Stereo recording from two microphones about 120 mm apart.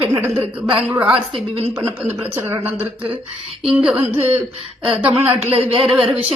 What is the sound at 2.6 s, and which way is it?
Speech, 60° right (ahead or behind).